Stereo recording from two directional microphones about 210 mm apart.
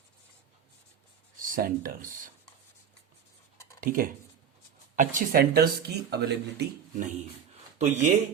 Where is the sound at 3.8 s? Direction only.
40° right (ahead or behind).